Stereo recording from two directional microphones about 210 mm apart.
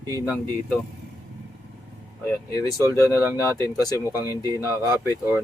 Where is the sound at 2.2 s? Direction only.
15° left (ahead or behind).